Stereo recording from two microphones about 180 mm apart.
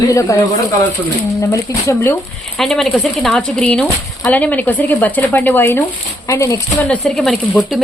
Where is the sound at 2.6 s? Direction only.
Centre (ahead or behind); by 6.8 s 15° left (ahead or behind).